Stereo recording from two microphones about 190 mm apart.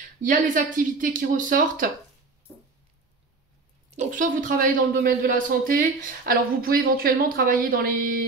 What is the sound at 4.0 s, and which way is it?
Speech, 40° right (ahead or behind).